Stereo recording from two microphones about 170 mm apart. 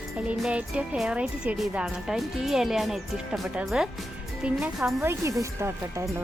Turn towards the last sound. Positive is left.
turn(degrees=-15)  # may be behind; listen again after turning